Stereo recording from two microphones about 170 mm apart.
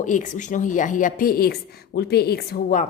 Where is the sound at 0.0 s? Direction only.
50° left (ahead or behind); by 2.7 s 65° left (ahead or behind).